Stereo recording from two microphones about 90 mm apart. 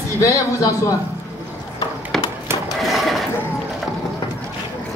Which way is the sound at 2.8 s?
Centre (ahead or behind).